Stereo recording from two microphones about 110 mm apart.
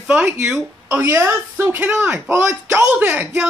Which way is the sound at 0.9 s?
20° right (ahead or behind).